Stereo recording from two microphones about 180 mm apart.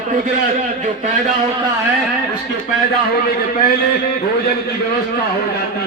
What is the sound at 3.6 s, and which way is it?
Speech, 55° left (ahead or behind).